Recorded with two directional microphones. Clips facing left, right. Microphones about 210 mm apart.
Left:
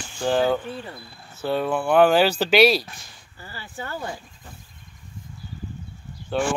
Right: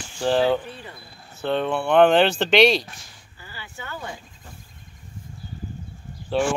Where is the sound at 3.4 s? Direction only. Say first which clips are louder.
Left 4 dB; 40° left (ahead or behind).